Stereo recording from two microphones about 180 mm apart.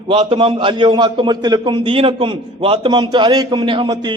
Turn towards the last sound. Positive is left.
turn(degrees=-25)  # may be behind; listen again after turning